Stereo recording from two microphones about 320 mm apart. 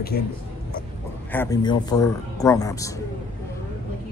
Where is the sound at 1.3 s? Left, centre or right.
Centre.